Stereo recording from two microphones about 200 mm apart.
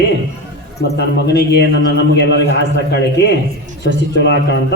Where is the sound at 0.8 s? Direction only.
55° left (ahead or behind).